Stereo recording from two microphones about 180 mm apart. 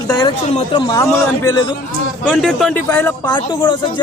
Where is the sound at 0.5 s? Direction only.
25° left (ahead or behind).